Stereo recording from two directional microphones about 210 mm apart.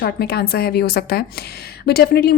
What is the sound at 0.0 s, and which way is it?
A woman's voice, 50° left (ahead or behind).